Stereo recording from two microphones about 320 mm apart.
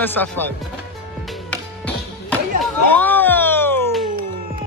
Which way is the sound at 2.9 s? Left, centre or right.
Centre.